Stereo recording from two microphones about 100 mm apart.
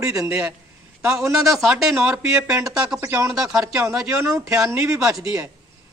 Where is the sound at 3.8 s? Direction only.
30° right (ahead or behind).